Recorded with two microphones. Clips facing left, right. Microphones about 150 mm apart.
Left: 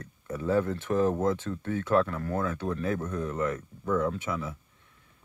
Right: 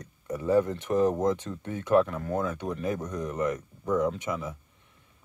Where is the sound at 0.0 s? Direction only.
15° right (ahead or behind).